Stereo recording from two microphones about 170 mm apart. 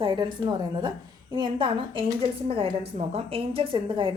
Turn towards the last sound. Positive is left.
turn(degrees=-30)  # may be behind; listen again after turning